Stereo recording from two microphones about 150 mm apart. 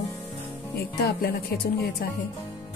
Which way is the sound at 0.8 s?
90° left.